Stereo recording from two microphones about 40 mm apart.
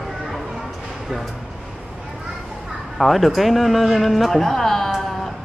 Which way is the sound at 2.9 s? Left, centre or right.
Centre.